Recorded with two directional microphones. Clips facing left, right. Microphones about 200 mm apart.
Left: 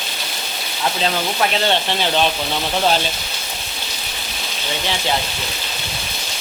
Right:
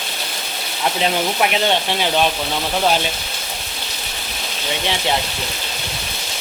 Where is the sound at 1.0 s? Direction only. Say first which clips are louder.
Right 2 dB; 15° right (ahead or behind).